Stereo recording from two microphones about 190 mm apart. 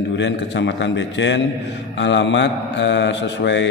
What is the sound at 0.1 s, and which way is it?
Mantra, 70° left (ahead or behind).